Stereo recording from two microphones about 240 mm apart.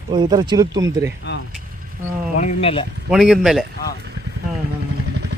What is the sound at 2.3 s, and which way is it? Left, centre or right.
Speech, left.